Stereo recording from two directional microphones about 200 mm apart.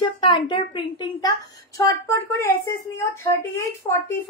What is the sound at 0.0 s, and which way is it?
Speech, 25° left (ahead or behind).